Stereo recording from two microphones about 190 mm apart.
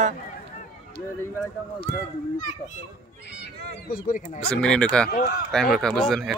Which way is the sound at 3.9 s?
45° left (ahead or behind).